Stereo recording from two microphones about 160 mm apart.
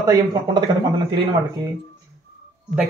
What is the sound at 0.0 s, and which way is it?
Speech, 25° right (ahead or behind).